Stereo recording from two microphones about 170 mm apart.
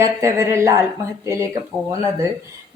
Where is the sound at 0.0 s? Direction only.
15° right (ahead or behind).